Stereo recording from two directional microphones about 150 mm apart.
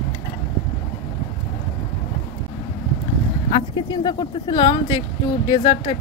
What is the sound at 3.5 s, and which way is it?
A woman's voice, 30° left (ahead or behind).